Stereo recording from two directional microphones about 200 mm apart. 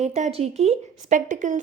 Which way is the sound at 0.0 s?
35° right (ahead or behind).